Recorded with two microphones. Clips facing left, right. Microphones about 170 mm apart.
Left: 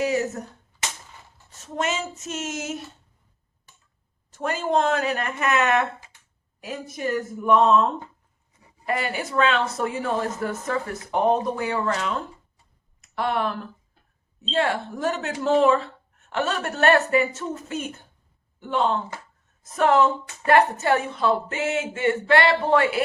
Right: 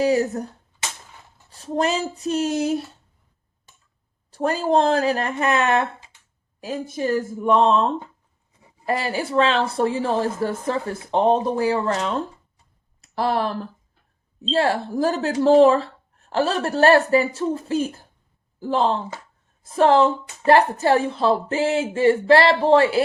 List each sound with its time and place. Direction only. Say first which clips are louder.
0.0 s speech: right 5 dB; 35° right (ahead or behind)
1.5 s speech: right 5 dB; 35° right (ahead or behind)
4.3 s a woman's voice: right 4 dB; 35° right (ahead or behind)